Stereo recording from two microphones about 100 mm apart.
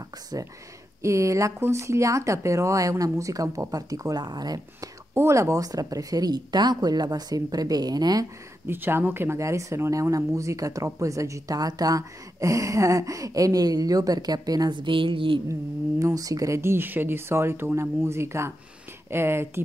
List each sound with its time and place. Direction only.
1.0 s speech: 30° right (ahead or behind)
5.1 s speech: 30° right (ahead or behind)
8.6 s speech: 20° right (ahead or behind); by 15.4 s 55° right (ahead or behind)
16.0 s speech: 35° right (ahead or behind)